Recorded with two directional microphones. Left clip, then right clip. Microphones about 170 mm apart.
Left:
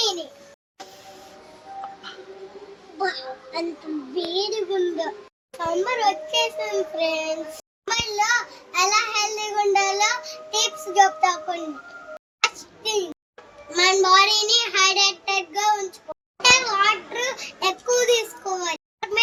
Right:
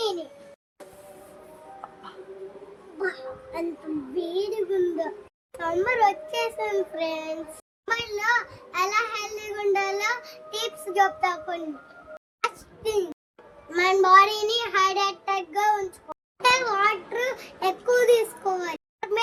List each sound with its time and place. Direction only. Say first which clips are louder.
0.0 s a sound: left 4 dB; 25° right (ahead or behind)
3.0 s child singing: left 4 dB; 25° right (ahead or behind)
4.4 s a child's voice: left 1 dB; 25° right (ahead or behind)
12.4 s hands: left 5 dB; 30° right (ahead or behind)
13.7 s a child's voice: even; 30° right (ahead or behind)